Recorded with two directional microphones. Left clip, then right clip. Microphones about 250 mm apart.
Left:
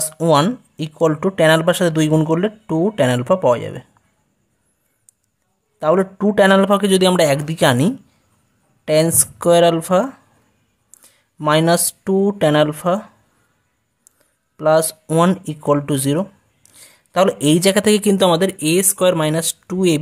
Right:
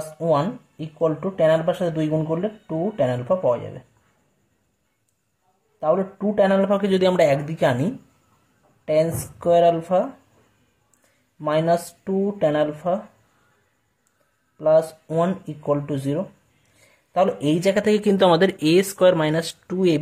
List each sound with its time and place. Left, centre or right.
0.2 s speech: left
5.8 s speech: left
14.6 s speech: left